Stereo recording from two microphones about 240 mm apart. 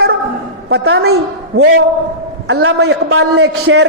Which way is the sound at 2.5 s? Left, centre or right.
Right.